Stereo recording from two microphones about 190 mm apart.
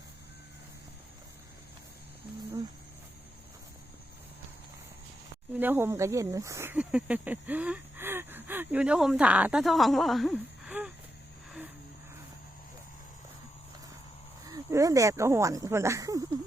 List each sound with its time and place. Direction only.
5.5 s speech: 10° right (ahead or behind)
14.4 s speech: 15° right (ahead or behind)